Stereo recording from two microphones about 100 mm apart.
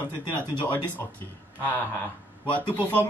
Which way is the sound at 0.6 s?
20° left (ahead or behind).